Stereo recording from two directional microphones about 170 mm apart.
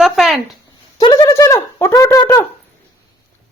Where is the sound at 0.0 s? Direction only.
Centre (ahead or behind).